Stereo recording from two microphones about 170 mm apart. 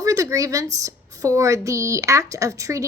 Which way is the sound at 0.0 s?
20° right (ahead or behind).